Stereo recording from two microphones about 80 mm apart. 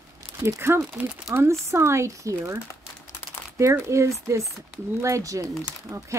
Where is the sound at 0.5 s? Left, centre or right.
Right.